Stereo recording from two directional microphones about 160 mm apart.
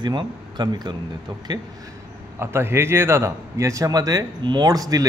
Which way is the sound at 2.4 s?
15° right (ahead or behind).